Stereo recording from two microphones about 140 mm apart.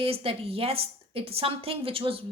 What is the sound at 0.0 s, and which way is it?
Speech, 45° right (ahead or behind).